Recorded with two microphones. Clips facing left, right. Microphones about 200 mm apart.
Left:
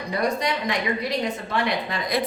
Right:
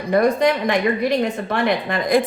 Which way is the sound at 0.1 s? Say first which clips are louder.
Right 9 dB; 50° right (ahead or behind).